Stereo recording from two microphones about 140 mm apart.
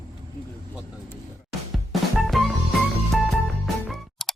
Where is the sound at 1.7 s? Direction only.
Centre (ahead or behind).